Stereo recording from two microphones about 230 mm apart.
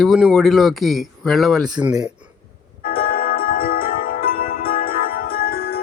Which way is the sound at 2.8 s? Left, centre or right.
Left.